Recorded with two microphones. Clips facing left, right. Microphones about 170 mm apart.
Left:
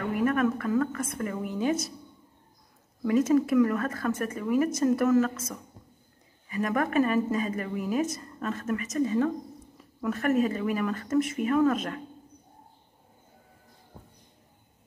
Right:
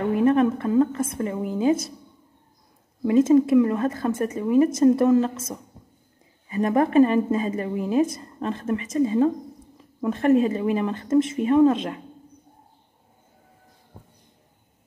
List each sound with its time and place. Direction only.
0.0 s a woman's voice: 30° right (ahead or behind)
3.0 s speech: 25° right (ahead or behind)
6.5 s speech: 30° right (ahead or behind)